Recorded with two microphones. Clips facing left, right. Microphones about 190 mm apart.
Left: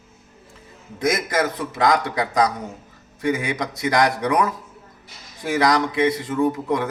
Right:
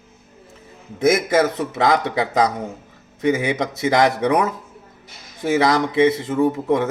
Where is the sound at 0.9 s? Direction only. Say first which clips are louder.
Right 5 dB; 25° right (ahead or behind).